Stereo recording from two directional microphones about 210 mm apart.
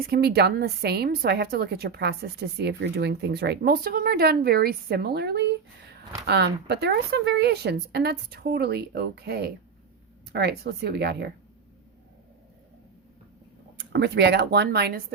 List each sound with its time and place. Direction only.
0.0 s a woman's voice: 50° right (ahead or behind)
13.7 s a woman's voice: 55° right (ahead or behind)